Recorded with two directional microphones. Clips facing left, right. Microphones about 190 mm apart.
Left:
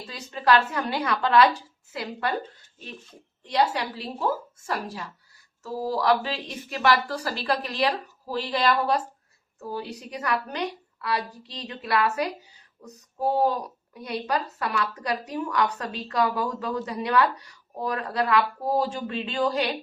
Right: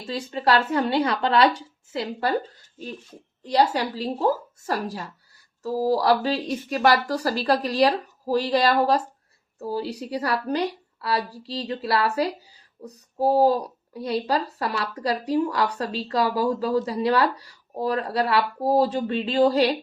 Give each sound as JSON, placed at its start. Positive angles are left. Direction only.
{"t": 0.1, "sound": "speech", "side_deg": -30}
{"t": 3.4, "sound": "a woman's voice", "side_deg": -40}